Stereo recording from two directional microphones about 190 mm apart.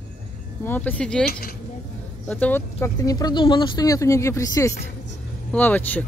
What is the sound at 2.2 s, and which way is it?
Speech, 10° left (ahead or behind).